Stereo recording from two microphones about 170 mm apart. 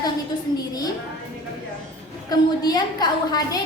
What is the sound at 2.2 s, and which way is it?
A woman's voice, 25° left (ahead or behind).